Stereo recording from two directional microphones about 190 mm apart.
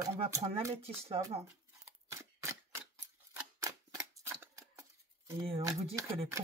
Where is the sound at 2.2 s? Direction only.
15° right (ahead or behind).